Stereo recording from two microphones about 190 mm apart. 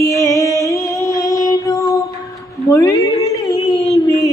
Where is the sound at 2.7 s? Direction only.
15° left (ahead or behind).